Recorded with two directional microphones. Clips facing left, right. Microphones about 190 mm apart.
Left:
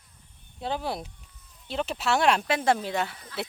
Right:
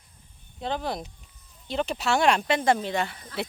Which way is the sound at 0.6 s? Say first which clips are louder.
Right 1 dB; 5° left (ahead or behind).